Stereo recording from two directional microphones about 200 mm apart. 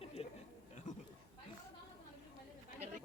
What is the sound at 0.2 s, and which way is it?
Chatter, 30° left (ahead or behind).